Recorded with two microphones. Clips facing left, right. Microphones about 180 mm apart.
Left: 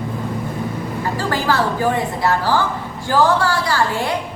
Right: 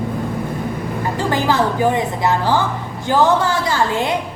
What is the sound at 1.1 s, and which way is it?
A woman's voice, 20° right (ahead or behind).